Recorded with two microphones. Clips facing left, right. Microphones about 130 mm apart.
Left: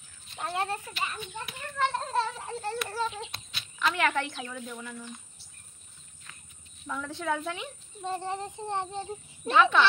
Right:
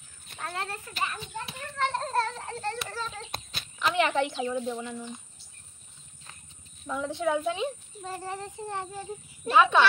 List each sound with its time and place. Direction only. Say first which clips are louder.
0.4 s speech: left 4 dB; 20° left (ahead or behind)
0.9 s a child's voice: right 2 dB; 35° right (ahead or behind)
1.8 s a child's voice: even; centre (ahead or behind)
3.8 s a woman's voice: right 2 dB; 20° right (ahead or behind)
6.9 s a woman's voice: right 4 dB; 20° right (ahead or behind)
8.0 s speech: left 3 dB; 20° left (ahead or behind)
9.6 s a woman's voice: right 1 dB; 20° right (ahead or behind)